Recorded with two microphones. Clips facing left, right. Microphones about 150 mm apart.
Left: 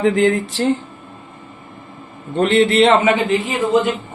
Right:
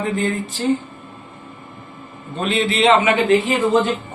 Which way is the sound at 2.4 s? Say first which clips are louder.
Left 5 dB; 65° left (ahead or behind).